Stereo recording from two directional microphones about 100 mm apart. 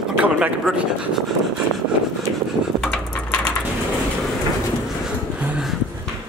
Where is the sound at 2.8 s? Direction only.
10° left (ahead or behind).